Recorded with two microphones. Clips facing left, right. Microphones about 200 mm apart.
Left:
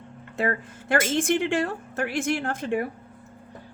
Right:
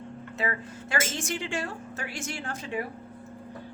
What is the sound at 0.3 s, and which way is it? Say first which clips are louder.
A woman's voice: left 6 dB; 50° left (ahead or behind).